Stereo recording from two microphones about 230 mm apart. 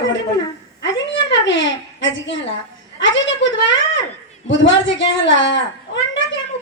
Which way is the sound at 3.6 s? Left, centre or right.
Left.